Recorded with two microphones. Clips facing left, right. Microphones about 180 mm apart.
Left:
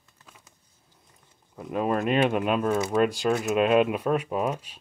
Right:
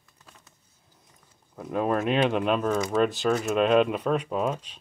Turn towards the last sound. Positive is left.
turn(degrees=10)  # may be behind; listen again after turning